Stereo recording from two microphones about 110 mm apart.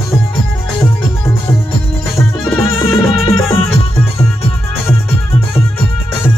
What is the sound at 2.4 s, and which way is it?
Music, centre (ahead or behind).